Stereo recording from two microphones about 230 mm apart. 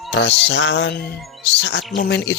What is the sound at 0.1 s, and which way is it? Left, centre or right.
Speech, left.